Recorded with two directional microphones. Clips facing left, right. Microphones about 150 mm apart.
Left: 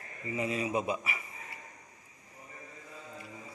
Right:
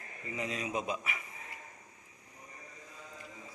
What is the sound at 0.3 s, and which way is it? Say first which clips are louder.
A man's voice: left 4 dB; 5° left (ahead or behind).